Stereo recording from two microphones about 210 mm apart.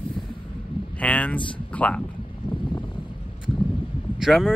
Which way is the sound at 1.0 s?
5° left (ahead or behind).